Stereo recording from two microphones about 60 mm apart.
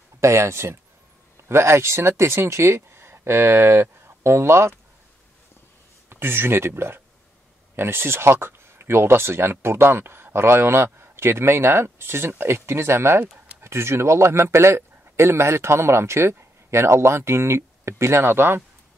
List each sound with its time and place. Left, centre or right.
0.2 s speech: right
6.0 s speech: right